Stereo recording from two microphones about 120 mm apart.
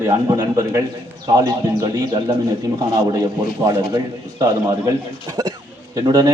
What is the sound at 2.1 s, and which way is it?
Speech, 45° right (ahead or behind).